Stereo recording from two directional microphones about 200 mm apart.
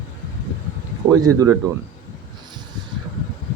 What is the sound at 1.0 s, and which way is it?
Speech, 20° right (ahead or behind).